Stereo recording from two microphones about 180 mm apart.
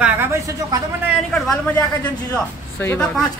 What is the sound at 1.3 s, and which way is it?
Speech, centre (ahead or behind).